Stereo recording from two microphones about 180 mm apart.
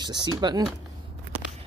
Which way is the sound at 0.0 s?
25° right (ahead or behind).